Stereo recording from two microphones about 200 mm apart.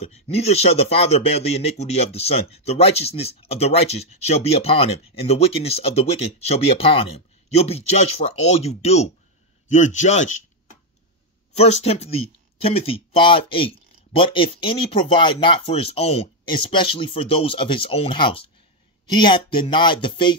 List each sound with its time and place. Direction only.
0.3 s speech: 30° left (ahead or behind)
11.5 s speech: 30° left (ahead or behind)